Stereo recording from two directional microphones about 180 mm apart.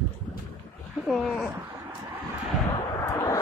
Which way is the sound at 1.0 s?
Centre (ahead or behind).